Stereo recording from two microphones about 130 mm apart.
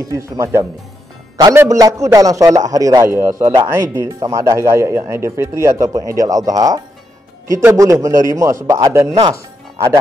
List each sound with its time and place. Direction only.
0.0 s speech: 25° right (ahead or behind)
3.3 s speech: 90° right
3.5 s speech: 20° right (ahead or behind)